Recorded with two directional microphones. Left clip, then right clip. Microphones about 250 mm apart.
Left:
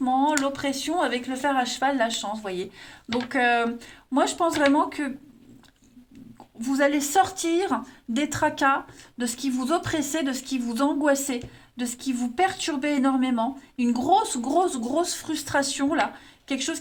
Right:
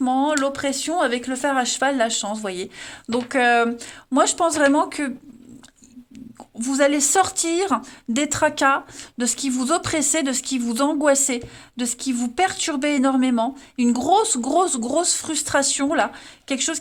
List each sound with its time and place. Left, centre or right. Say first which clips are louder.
0.0 s speech: right 2 dB; right
6.7 s speech: right 4 dB; right